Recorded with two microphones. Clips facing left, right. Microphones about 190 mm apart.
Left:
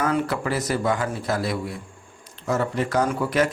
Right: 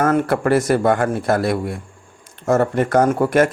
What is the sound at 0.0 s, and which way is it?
Speech, 50° right (ahead or behind).